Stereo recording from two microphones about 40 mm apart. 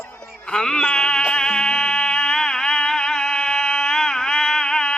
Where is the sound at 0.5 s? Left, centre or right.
Centre.